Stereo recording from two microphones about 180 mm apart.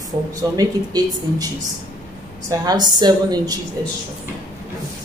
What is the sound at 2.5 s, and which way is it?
Speech, 20° right (ahead or behind).